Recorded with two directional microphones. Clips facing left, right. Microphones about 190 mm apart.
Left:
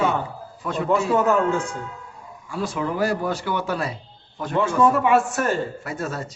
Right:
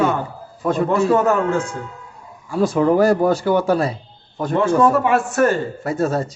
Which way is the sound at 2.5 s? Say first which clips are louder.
Right 10 dB; 40° right (ahead or behind).